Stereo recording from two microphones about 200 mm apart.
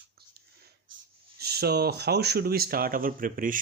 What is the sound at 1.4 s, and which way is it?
Speech, 50° right (ahead or behind).